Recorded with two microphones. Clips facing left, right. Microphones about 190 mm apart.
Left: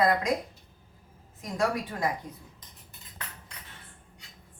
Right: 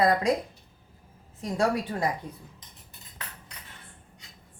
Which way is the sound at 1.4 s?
30° right (ahead or behind).